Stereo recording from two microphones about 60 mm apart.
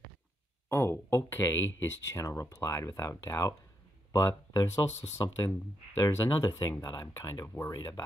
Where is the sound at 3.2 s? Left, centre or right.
Left.